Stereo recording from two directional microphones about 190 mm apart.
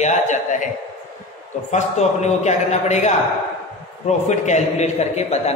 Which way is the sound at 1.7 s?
35° left (ahead or behind).